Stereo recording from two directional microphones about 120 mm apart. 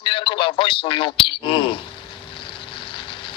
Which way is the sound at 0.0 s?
45° left (ahead or behind).